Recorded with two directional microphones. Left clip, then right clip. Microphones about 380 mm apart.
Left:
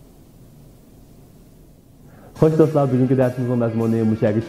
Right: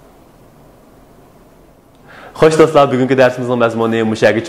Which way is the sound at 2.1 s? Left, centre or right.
Centre.